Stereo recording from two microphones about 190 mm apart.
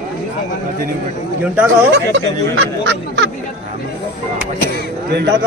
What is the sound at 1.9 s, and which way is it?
Speech, 70° right (ahead or behind).